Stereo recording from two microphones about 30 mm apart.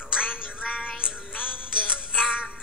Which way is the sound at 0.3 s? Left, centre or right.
Right.